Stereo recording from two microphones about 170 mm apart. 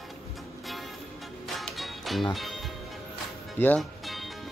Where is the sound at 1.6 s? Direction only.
Centre (ahead or behind).